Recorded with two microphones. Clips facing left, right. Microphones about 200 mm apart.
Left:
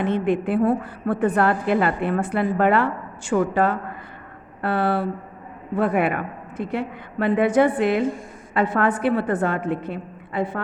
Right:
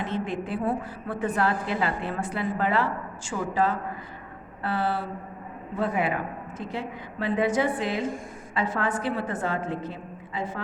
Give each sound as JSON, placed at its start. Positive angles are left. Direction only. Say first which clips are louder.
{"t": 0.0, "sound": "a woman's voice", "louder": "left 8 dB", "side_deg": 60}